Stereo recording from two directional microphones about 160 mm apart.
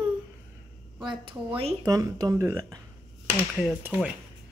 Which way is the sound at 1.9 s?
20° right (ahead or behind).